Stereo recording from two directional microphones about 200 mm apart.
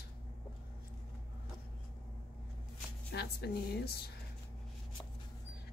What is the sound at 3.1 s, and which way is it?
Speech, 55° left (ahead or behind).